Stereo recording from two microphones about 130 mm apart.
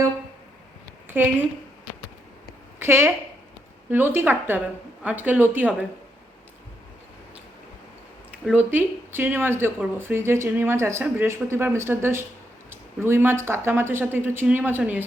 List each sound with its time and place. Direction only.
1.2 s speech: 15° right (ahead or behind)
2.7 s a woman's voice: 20° right (ahead or behind)
8.3 s speech: 10° right (ahead or behind)